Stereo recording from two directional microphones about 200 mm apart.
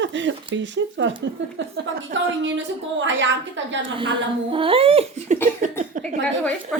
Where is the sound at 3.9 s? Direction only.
25° right (ahead or behind).